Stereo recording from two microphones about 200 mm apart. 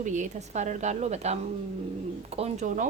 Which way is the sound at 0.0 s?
35° right (ahead or behind).